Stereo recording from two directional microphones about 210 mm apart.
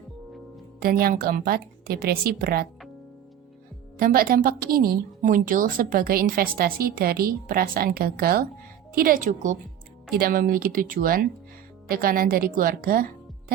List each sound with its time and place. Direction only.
0.8 s a woman's voice: 45° right (ahead or behind)
4.0 s a woman's voice: 45° right (ahead or behind)